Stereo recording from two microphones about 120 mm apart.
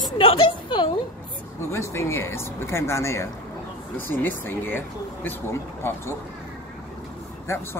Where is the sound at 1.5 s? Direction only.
25° left (ahead or behind).